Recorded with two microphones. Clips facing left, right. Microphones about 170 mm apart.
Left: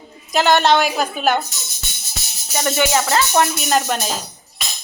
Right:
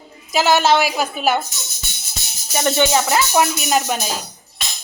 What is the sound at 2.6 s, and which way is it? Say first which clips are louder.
Speech: right 1 dB; 20° right (ahead or behind).